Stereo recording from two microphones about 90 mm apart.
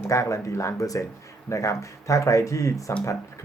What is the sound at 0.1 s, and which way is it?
Speech, 35° left (ahead or behind).